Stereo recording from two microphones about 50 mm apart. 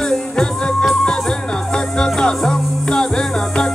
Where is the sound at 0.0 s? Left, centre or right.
Centre.